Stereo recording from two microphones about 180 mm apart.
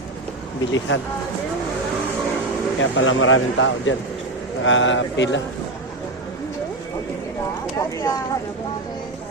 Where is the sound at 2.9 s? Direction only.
90° left.